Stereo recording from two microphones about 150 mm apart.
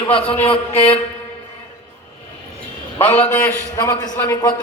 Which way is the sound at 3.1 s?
10° left (ahead or behind).